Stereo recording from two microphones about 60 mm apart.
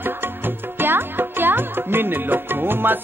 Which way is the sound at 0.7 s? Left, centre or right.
Right.